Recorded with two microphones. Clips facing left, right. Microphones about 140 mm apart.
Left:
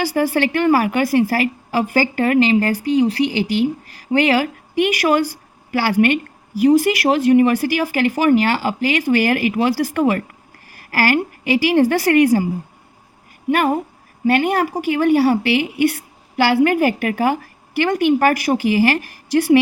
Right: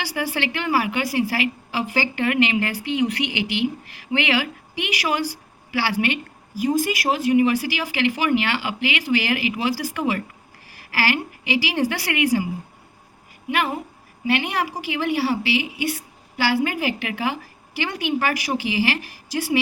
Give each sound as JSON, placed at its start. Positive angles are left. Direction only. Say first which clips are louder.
{"t": 0.0, "sound": "a woman's voice", "louder": "left 8 dB", "side_deg": 45}
{"t": 6.6, "sound": "a woman's voice", "louder": "left 8 dB", "side_deg": 70}
{"t": 13.5, "sound": "a woman's voice", "louder": "left 7 dB", "side_deg": 45}